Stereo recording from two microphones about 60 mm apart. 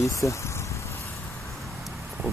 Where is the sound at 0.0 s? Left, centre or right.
Left.